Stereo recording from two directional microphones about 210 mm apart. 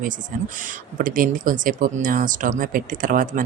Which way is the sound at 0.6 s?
40° right (ahead or behind).